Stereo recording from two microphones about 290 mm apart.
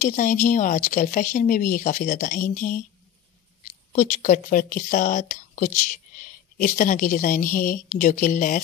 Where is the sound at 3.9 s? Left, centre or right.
Left.